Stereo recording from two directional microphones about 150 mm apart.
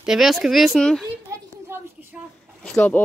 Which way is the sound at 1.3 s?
20° right (ahead or behind).